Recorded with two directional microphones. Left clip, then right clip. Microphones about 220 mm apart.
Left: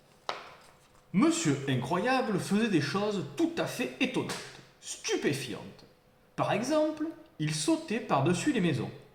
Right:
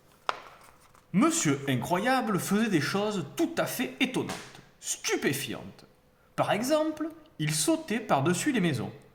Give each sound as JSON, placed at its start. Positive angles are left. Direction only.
{"t": 1.1, "sound": "speech", "side_deg": -55}